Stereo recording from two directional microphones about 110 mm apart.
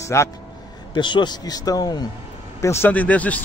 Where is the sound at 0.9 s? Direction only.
45° left (ahead or behind).